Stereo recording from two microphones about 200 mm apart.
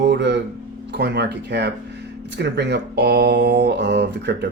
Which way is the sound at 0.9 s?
55° right (ahead or behind).